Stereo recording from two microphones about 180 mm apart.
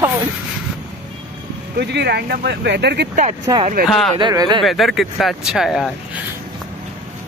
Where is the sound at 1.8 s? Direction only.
65° right (ahead or behind).